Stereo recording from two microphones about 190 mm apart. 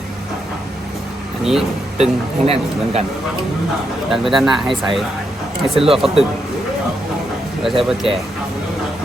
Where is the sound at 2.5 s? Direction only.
35° right (ahead or behind).